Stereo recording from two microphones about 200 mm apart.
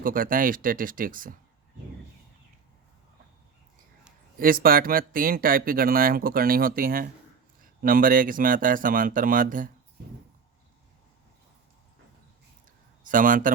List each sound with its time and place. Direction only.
0.0 s speech: 45° right (ahead or behind)
4.4 s speech: 45° right (ahead or behind)
13.1 s speech: 45° right (ahead or behind)